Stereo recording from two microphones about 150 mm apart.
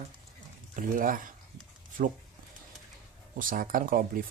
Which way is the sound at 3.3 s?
65° right (ahead or behind).